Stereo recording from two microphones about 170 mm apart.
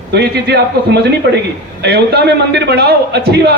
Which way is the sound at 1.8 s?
70° right (ahead or behind).